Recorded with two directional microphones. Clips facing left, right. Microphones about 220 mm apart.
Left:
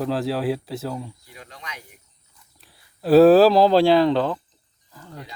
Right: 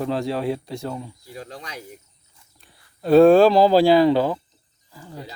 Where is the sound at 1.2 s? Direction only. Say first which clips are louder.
Right 5 dB; 35° right (ahead or behind).